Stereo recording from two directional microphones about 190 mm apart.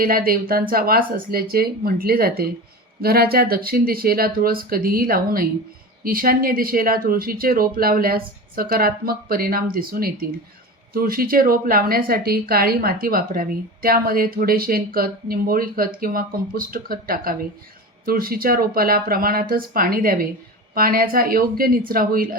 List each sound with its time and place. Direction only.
0.0 s a woman's voice: 50° right (ahead or behind)